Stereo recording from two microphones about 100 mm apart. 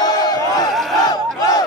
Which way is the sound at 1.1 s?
40° left (ahead or behind).